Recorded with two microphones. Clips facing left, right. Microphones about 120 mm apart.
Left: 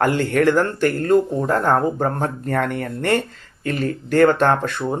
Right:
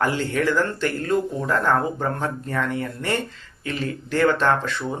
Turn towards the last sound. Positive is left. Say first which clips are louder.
# left 3 dB
turn(degrees=50)  # may be behind; listen again after turning